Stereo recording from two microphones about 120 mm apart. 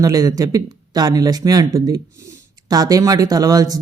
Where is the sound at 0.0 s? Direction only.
30° right (ahead or behind).